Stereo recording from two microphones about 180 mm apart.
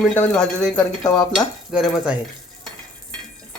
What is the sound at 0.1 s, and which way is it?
Speech, 10° left (ahead or behind).